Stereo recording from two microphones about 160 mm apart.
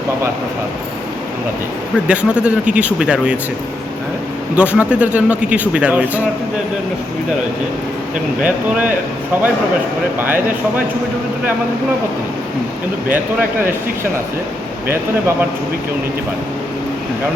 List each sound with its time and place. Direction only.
2.0 s speech: 5° right (ahead or behind)
4.5 s speech: 10° right (ahead or behind)
8.4 s speech: 10° right (ahead or behind)
10.2 s speech: 10° right (ahead or behind)
13.1 s speech: 10° right (ahead or behind)